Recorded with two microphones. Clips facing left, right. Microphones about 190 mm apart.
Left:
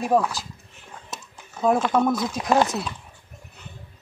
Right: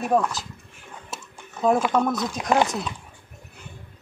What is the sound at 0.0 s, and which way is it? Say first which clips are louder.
Speech: left 1 dB; centre (ahead or behind).